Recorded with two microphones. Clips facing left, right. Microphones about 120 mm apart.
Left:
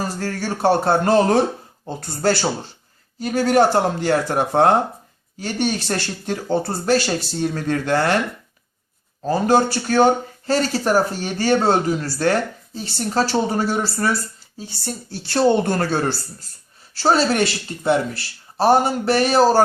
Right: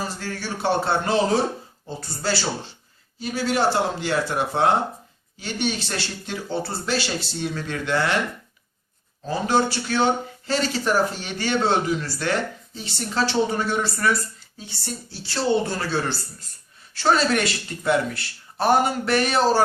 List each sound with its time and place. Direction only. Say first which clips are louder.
0.0 s speech: left 5 dB; 45° left (ahead or behind)
9.2 s speech: left 5 dB; 45° left (ahead or behind)
14.8 s speech: left 4 dB; 50° left (ahead or behind)
16.9 s speech: left 3 dB; 35° left (ahead or behind)